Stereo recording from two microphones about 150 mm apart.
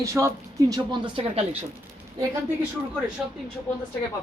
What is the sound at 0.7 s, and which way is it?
Speech, 30° right (ahead or behind).